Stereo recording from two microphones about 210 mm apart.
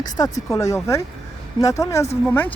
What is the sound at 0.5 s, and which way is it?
Speech, 15° left (ahead or behind).